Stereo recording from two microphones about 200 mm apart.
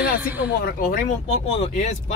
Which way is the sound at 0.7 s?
45° left (ahead or behind).